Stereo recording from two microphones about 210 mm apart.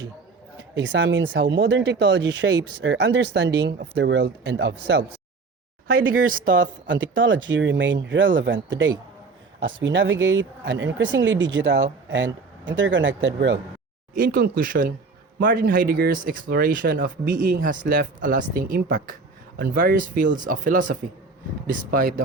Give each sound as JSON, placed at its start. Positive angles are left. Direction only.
{"t": 0.8, "sound": "speech", "side_deg": -60}
{"t": 6.2, "sound": "speech", "side_deg": -40}
{"t": 6.5, "sound": "speech", "side_deg": -60}
{"t": 14.2, "sound": "speech", "side_deg": -45}